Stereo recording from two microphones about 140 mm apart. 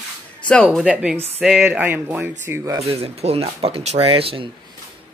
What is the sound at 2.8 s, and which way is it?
Speech, 45° right (ahead or behind).